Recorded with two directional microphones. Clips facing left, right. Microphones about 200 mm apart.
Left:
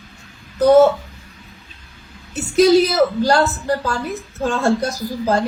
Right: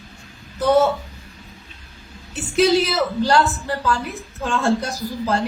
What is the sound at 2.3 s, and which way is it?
A woman's voice, 40° left (ahead or behind).